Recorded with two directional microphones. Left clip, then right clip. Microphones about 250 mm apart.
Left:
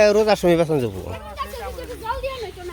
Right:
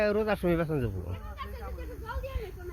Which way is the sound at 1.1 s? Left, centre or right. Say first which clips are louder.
Left 12 dB; left.